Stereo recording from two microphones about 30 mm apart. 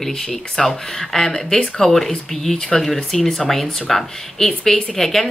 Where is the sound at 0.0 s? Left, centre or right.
Centre.